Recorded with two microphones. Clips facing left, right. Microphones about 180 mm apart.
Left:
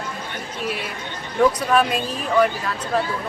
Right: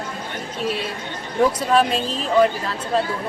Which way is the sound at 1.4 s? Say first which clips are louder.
Even; 25° right (ahead or behind).